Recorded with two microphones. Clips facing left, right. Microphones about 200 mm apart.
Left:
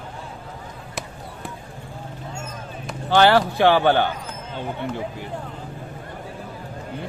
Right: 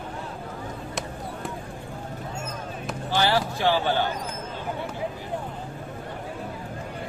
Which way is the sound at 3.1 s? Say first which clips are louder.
Left 8 dB; 65° left (ahead or behind).